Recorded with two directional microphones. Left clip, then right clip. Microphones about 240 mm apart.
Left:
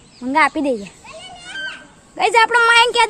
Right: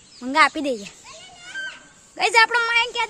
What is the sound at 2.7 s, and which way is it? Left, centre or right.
Speech, centre.